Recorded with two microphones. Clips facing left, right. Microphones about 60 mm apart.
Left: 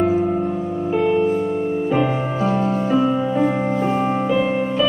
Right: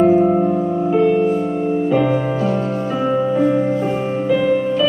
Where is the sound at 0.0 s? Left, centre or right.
Centre.